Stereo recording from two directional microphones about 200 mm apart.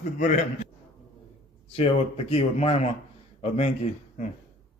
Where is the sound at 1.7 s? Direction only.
30° left (ahead or behind).